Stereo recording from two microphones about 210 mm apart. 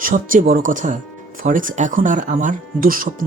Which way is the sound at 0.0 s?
40° right (ahead or behind).